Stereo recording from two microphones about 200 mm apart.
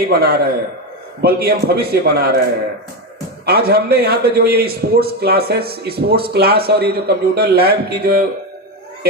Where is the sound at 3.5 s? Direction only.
50° right (ahead or behind).